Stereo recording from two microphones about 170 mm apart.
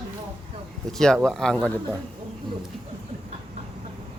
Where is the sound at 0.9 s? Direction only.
5° left (ahead or behind).